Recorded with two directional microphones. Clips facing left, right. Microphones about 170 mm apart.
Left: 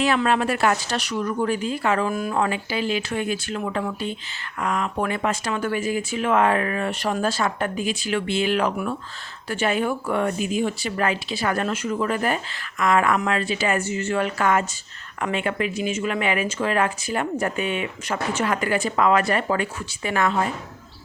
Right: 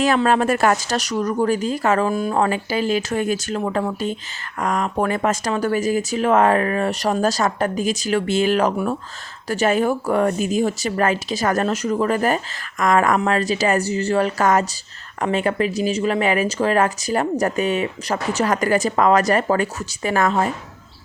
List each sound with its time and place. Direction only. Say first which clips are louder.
0.3 s speech: right 4 dB; 45° right (ahead or behind)